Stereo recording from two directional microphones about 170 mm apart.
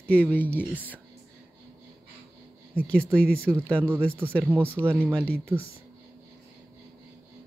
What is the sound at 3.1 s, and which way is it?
Speech, 5° left (ahead or behind).